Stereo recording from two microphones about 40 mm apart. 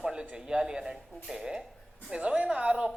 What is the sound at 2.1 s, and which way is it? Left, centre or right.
Speech, right.